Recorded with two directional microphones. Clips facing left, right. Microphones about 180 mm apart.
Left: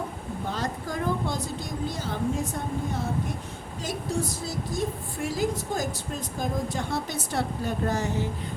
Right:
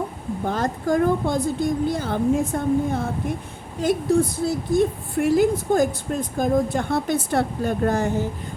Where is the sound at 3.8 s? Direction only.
55° right (ahead or behind).